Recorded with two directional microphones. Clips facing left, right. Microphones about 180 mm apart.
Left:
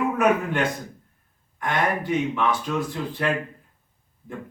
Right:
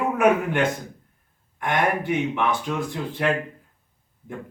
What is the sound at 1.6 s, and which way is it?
Speech, 15° right (ahead or behind).